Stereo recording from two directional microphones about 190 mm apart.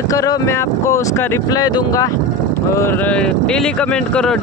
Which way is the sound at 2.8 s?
10° left (ahead or behind).